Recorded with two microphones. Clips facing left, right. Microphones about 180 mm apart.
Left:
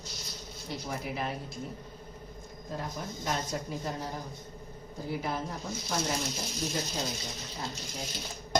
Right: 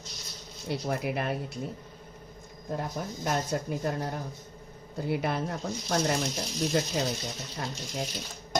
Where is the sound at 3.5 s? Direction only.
60° right (ahead or behind).